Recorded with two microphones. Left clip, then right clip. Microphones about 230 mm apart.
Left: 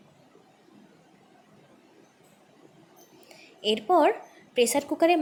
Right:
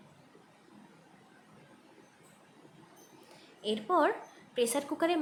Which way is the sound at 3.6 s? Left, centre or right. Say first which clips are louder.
Left 7 dB; left.